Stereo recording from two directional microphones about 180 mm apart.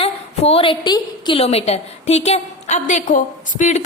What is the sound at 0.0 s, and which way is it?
A woman's voice, 35° left (ahead or behind).